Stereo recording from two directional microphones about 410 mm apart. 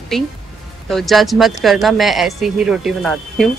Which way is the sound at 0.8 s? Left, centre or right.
Centre.